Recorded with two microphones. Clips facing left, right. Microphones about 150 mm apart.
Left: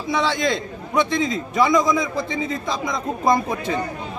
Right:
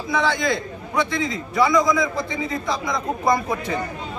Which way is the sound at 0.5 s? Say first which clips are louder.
Left 1 dB; 20° left (ahead or behind).